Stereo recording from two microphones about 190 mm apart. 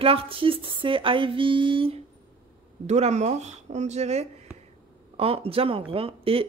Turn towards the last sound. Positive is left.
turn(degrees=-30)  # may be behind; listen again after turning